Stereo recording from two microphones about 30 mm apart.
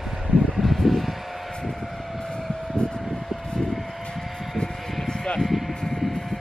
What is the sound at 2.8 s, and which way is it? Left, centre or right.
Vehicle, left.